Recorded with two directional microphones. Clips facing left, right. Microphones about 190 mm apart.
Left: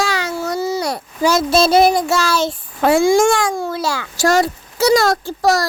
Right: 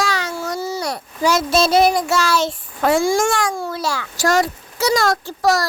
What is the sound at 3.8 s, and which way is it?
A child's voice, 30° left (ahead or behind).